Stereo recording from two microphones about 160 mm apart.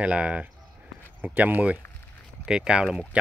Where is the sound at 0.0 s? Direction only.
5° right (ahead or behind).